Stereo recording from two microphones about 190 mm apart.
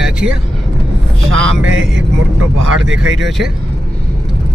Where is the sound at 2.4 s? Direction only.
90° right.